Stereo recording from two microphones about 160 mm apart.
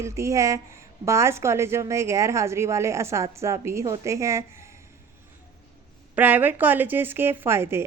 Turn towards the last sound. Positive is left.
turn(degrees=-15)  # may be behind; listen again after turning